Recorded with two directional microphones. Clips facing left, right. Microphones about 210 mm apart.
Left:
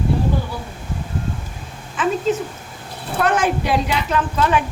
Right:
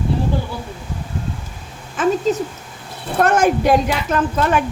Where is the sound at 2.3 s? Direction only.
40° right (ahead or behind).